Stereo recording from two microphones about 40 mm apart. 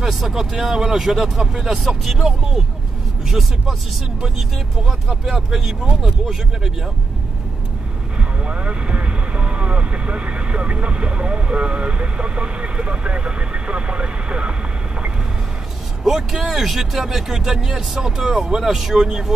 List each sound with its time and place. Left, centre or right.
0.0 s speech: centre
8.5 s speech: right
16.0 s speech: centre